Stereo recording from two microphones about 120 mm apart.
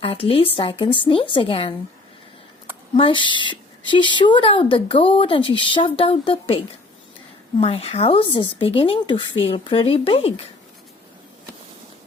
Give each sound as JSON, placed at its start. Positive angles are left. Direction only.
{"t": 0.0, "sound": "a woman's voice", "side_deg": 50}
{"t": 2.9, "sound": "a woman's voice", "side_deg": 45}
{"t": 7.6, "sound": "a woman's voice", "side_deg": 55}